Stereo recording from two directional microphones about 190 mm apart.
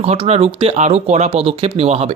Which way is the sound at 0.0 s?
35° right (ahead or behind).